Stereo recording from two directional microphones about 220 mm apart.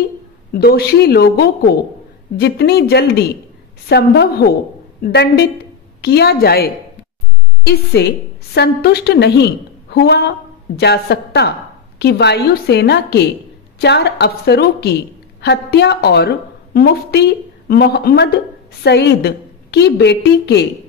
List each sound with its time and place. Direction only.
0.5 s a woman's voice: 45° left (ahead or behind)